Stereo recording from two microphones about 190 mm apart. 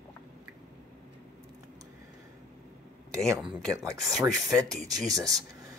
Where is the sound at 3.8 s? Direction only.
15° right (ahead or behind).